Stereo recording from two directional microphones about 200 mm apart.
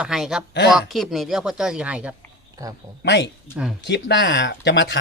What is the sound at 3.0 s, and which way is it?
Speech, 60° left (ahead or behind).